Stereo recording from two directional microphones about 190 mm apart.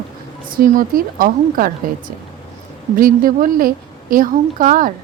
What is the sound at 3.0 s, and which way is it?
A woman's voice, 50° right (ahead or behind).